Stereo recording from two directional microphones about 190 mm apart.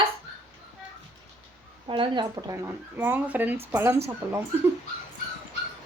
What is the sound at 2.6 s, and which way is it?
Speech, 10° right (ahead or behind).